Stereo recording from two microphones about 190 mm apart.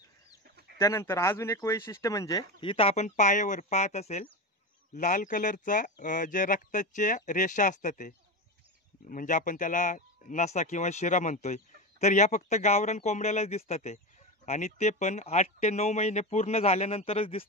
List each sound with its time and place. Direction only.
0.7 s speech: 15° left (ahead or behind); by 8.1 s 40° left (ahead or behind)
9.1 s speech: 45° left (ahead or behind)